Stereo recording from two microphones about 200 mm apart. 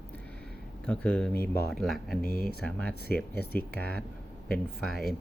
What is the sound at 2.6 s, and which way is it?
Speech, 5° left (ahead or behind).